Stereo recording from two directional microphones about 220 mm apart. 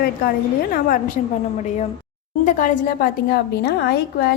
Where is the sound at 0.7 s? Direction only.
40° left (ahead or behind).